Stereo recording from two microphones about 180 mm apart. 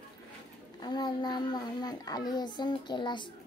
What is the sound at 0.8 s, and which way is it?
Child singing, 25° left (ahead or behind).